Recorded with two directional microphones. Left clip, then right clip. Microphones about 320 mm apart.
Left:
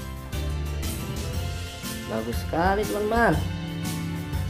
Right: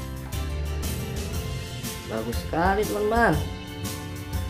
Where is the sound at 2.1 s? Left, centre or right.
Centre.